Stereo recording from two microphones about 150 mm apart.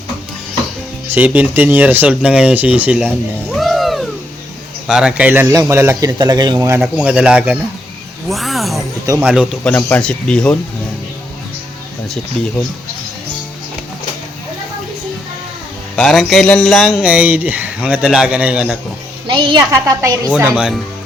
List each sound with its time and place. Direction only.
1.0 s a man's voice: 10° right (ahead or behind)
3.5 s music: centre (ahead or behind)
4.9 s a man's voice: 5° right (ahead or behind)
6.8 s a man's voice: 10° right (ahead or behind)
9.6 s speech: 10° left (ahead or behind)
16.0 s a man's voice: centre (ahead or behind)
19.3 s a woman's voice: 30° right (ahead or behind)
19.7 s a man's voice: 20° right (ahead or behind)
20.6 s speech: centre (ahead or behind)